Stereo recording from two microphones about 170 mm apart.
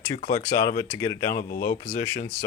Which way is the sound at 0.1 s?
45° left (ahead or behind).